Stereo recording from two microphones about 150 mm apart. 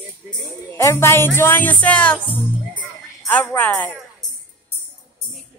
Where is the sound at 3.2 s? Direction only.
10° left (ahead or behind).